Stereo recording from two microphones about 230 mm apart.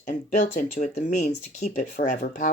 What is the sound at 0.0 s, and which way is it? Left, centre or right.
Speech, left.